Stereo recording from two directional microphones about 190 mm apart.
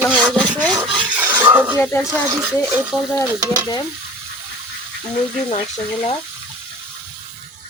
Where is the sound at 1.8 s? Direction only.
10° left (ahead or behind).